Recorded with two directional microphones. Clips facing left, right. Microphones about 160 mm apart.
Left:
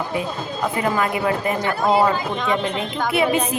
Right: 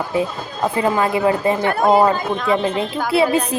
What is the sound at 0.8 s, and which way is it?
Speech, 30° right (ahead or behind).